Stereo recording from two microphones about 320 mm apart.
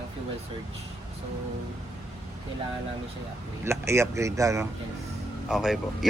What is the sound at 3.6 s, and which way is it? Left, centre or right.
Speech, centre.